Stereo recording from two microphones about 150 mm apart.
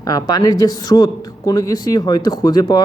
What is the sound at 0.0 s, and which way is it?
Speech, 25° left (ahead or behind).